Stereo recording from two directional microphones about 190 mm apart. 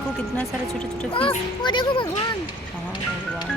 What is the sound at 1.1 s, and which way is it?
Speech, 25° left (ahead or behind).